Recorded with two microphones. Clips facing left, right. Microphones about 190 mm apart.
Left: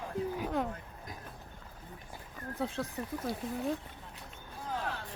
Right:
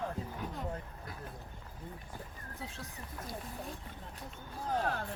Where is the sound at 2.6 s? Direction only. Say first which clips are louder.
Left 11 dB; 60° left (ahead or behind).